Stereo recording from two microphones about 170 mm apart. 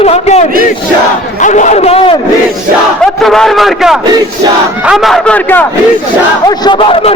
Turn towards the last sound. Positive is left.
turn(degrees=30)  # may be behind; listen again after turning